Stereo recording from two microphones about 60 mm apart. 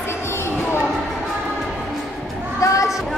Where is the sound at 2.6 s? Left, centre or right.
Left.